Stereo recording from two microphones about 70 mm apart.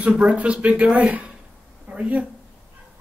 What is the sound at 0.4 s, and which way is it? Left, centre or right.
Speech, centre.